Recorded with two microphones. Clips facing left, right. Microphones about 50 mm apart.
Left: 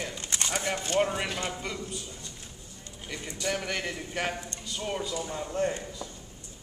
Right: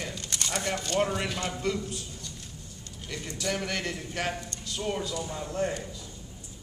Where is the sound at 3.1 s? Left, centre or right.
Centre.